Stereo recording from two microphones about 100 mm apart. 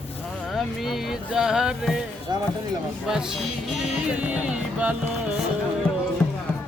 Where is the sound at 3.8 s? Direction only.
10° right (ahead or behind).